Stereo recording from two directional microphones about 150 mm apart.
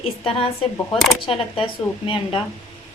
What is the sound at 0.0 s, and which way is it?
A woman's voice, 40° left (ahead or behind).